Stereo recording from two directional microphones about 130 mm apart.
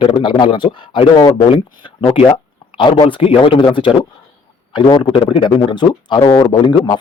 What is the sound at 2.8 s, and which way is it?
A man's voice, 40° left (ahead or behind).